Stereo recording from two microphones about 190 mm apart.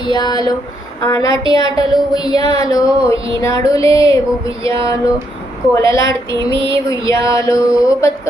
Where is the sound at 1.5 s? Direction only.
20° left (ahead or behind).